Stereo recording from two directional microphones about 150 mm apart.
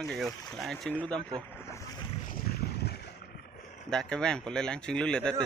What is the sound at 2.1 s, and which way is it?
Boat, 65° left (ahead or behind).